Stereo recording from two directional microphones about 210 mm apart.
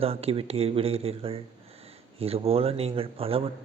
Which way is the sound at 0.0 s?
30° right (ahead or behind).